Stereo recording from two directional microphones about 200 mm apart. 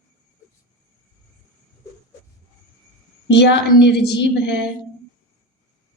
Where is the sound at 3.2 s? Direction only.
60° left (ahead or behind).